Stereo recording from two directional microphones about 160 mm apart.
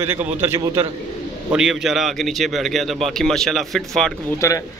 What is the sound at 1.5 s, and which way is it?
A man's voice, 5° right (ahead or behind).